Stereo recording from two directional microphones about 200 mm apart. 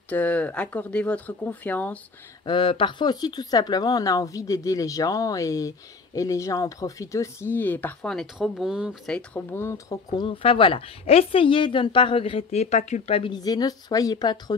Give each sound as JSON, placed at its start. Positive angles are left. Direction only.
{"t": 0.1, "sound": "speech", "side_deg": 5}
{"t": 2.4, "sound": "speech", "side_deg": 25}